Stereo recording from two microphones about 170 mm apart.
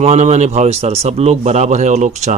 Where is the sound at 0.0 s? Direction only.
40° right (ahead or behind).